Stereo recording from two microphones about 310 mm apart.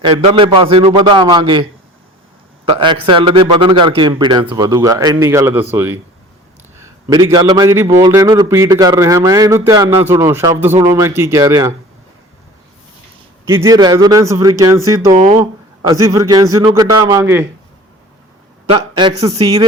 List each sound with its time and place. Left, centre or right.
0.0 s a man's voice: centre
2.6 s a man's voice: centre
7.3 s a man's voice: centre
13.5 s a man's voice: centre
15.1 s speech: right
15.9 s a man's voice: centre
18.9 s a man's voice: centre